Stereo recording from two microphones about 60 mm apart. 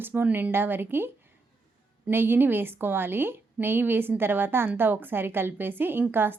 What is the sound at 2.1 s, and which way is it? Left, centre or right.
A woman's voice, right.